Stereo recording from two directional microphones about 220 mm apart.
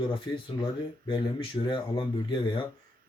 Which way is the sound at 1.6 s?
20° left (ahead or behind).